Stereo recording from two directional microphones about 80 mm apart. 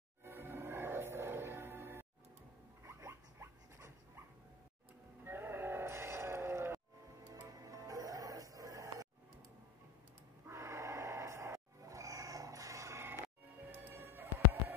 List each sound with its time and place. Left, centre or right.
0.2 s music: right
2.8 s zipper: right
5.2 s music: right
7.4 s music: right
10.4 s music: right